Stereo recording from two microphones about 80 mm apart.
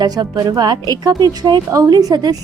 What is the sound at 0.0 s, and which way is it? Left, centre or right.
A woman's voice, right.